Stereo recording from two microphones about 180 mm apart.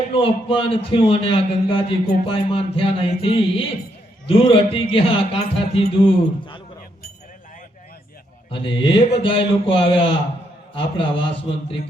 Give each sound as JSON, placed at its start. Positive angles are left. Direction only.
{"t": 0.1, "sound": "speech", "side_deg": 30}
{"t": 8.4, "sound": "speech", "side_deg": 30}